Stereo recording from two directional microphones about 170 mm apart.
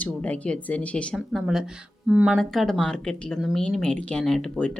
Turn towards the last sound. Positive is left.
turn(degrees=5)  # may be behind; listen again after turning